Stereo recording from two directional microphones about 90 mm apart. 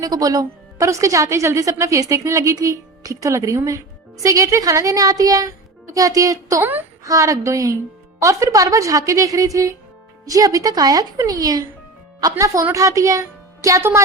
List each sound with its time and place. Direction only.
0.0 s a woman's voice: 40° right (ahead or behind)